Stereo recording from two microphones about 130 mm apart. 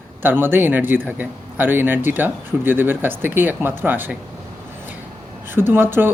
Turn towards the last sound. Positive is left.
turn(degrees=-15)  # may be behind; listen again after turning